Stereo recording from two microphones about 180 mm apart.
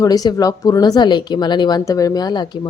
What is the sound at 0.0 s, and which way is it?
Speech, 20° left (ahead or behind).